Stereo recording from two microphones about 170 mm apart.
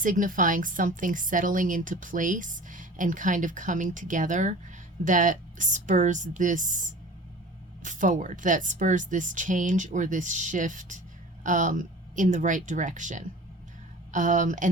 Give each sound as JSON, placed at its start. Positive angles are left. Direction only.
{"t": 0.0, "sound": "a woman's voice", "side_deg": -50}